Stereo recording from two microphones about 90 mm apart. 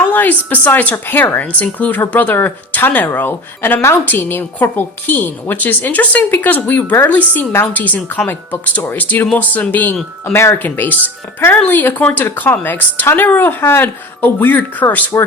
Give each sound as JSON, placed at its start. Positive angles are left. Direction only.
{"t": 0.1, "sound": "a woman's voice", "side_deg": 20}